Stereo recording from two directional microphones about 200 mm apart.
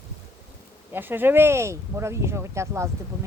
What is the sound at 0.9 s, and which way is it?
Speech, 10° right (ahead or behind).